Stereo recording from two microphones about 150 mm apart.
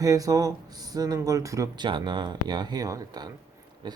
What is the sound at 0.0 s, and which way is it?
Speech, 25° right (ahead or behind).